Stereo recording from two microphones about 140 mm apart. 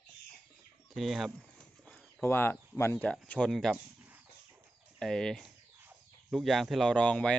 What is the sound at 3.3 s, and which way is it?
Speech, 5° left (ahead or behind).